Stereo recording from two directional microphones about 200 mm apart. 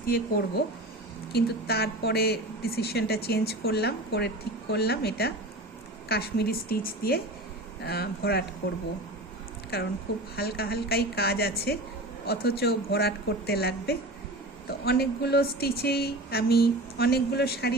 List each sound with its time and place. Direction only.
0.0 s a woman's voice: 45° left (ahead or behind)
9.7 s a woman's voice: 50° left (ahead or behind)